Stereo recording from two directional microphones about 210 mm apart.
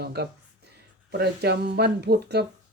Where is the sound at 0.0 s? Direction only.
50° right (ahead or behind).